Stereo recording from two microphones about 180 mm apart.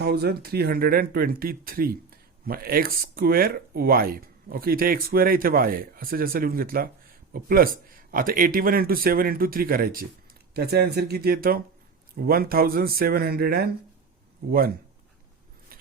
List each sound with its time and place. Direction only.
0.0 s a man's voice: 65° right (ahead or behind)